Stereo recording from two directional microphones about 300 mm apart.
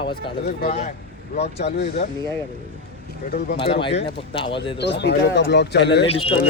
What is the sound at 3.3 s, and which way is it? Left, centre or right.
Speech, left.